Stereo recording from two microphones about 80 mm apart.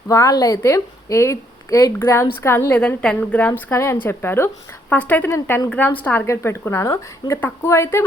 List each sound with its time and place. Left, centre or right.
0.1 s a woman's voice: left
2.7 s a woman's voice: centre
3.7 s a woman's voice: left
5.6 s a woman's voice: left
6.2 s a woman's voice: left